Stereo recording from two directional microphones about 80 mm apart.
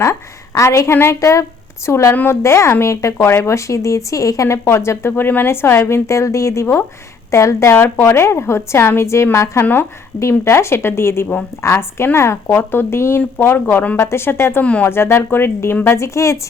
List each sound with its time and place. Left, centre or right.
0.0 s a woman's voice: left
14.6 s a woman's voice: centre
14.8 s speech: left